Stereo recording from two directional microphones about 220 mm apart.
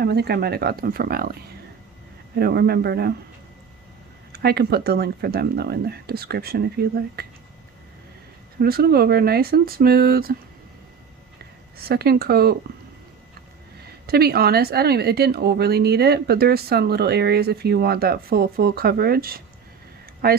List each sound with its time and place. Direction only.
0.0 s a woman's voice: 45° right (ahead or behind)
2.3 s a woman's voice: 45° right (ahead or behind)
4.3 s a woman's voice: 45° right (ahead or behind)
8.5 s a woman's voice: 45° right (ahead or behind)
11.8 s a woman's voice: 45° right (ahead or behind)
13.7 s a woman's voice: 45° right (ahead or behind)